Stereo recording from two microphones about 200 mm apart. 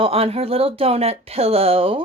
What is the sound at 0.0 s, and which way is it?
Speech, 30° right (ahead or behind).